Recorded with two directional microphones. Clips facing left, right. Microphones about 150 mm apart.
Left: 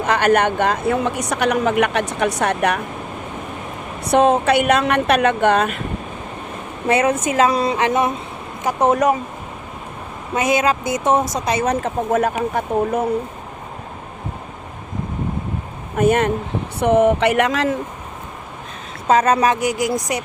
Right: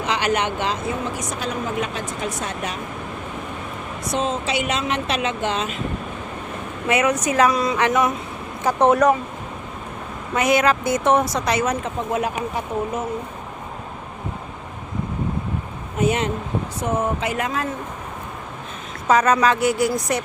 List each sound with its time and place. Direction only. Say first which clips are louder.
0.0 s speech: left 6 dB; 50° left (ahead or behind)
4.0 s speech: left 10 dB; 65° left (ahead or behind)
6.8 s speech: left 3 dB; 30° left (ahead or behind)
10.3 s speech: even; 20° left (ahead or behind)
11.5 s a woman's voice: left 6 dB; 35° left (ahead or behind); by 13.1 s 55° left (ahead or behind)
16.0 s a woman's voice: left 5 dB; 55° left (ahead or behind)
16.8 s speech: left 10 dB; 70° left (ahead or behind); by 17.7 s 85° left
19.0 s speech: left 2 dB; 25° left (ahead or behind)
19.5 s speech: even; 15° left (ahead or behind)